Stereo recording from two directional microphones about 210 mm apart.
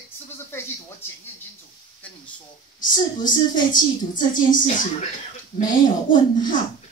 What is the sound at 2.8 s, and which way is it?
Speech, 40° left (ahead or behind).